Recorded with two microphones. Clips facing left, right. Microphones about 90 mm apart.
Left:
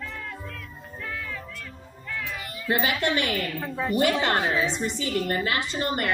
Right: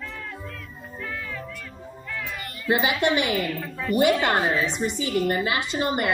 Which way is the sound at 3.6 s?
25° left (ahead or behind).